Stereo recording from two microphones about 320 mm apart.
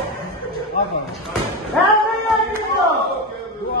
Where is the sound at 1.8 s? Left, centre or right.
Centre.